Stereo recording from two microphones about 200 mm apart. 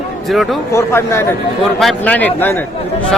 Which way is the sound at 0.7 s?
15° left (ahead or behind).